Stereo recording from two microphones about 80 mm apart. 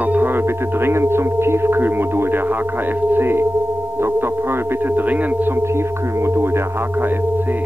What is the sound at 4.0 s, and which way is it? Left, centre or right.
Music, right.